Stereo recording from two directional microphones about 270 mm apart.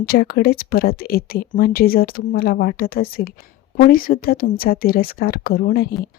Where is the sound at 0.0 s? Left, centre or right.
Left.